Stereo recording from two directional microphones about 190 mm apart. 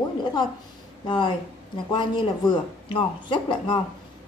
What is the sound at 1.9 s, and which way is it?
A man's voice, 25° left (ahead or behind).